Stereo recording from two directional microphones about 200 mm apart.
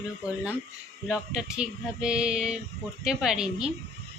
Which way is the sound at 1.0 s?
5° right (ahead or behind).